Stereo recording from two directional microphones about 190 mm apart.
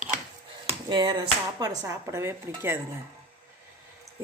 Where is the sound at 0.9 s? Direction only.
25° right (ahead or behind).